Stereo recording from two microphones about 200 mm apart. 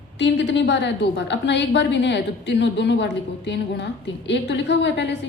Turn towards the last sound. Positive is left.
turn(degrees=60)  # may be behind; listen again after turning